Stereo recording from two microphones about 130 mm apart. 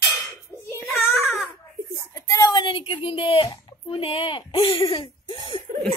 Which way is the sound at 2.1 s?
30° left (ahead or behind).